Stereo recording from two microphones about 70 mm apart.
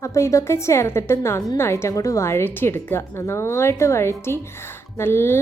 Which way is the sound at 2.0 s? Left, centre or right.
Left.